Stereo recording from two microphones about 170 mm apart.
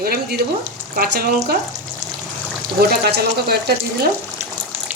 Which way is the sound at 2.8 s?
70° right (ahead or behind).